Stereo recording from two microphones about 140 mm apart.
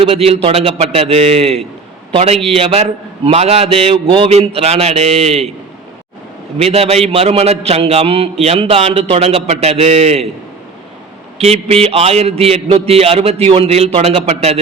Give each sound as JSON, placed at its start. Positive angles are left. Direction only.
{"t": 0.0, "sound": "a man's voice", "side_deg": -45}
{"t": 6.6, "sound": "a man's voice", "side_deg": -45}
{"t": 11.3, "sound": "a man's voice", "side_deg": -45}